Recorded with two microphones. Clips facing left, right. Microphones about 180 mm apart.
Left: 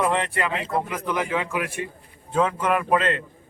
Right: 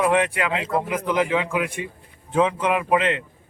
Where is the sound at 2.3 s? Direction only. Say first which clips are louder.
Right 2 dB; 15° right (ahead or behind).